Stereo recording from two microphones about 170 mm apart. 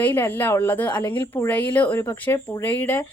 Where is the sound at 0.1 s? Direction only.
10° left (ahead or behind).